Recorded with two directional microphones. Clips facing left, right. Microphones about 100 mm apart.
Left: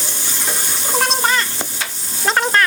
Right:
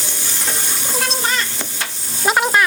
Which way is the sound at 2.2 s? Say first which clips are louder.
Right 1 dB; 10° right (ahead or behind).